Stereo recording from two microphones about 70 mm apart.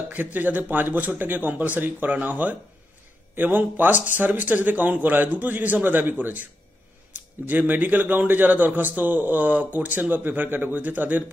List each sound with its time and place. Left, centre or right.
0.1 s a man's voice: right